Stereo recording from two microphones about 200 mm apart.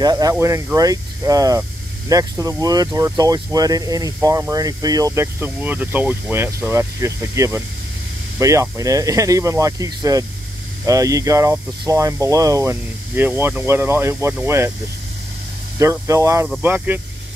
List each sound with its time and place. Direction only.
0.0 s speech: 20° right (ahead or behind)
15.8 s speech: 15° right (ahead or behind)